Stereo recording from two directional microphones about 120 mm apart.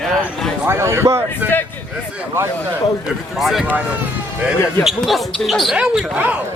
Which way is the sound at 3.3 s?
Centre (ahead or behind).